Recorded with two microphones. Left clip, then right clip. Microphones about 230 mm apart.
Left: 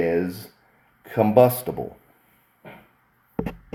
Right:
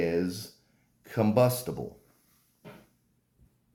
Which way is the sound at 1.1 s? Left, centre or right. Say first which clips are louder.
Left 8 dB; centre.